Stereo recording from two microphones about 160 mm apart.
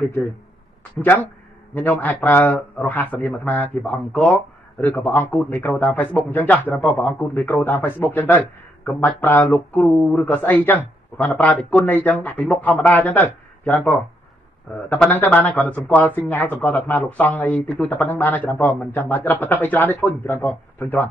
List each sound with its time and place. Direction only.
0.9 s a man's voice: 10° left (ahead or behind)